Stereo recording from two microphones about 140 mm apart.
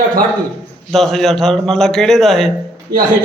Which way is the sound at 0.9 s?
Centre (ahead or behind).